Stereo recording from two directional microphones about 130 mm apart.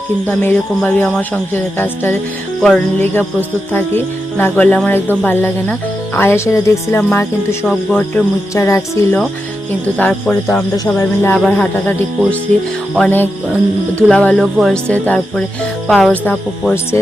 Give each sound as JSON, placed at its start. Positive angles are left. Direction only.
{"t": 0.3, "sound": "speech", "side_deg": 15}
{"t": 2.6, "sound": "music", "side_deg": 5}
{"t": 3.0, "sound": "speech", "side_deg": 15}
{"t": 8.5, "sound": "speech", "side_deg": 20}
{"t": 15.9, "sound": "music", "side_deg": 0}
{"t": 16.2, "sound": "speech", "side_deg": 10}